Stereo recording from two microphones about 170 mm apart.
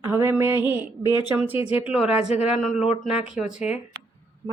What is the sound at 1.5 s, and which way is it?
Speech, 35° left (ahead or behind).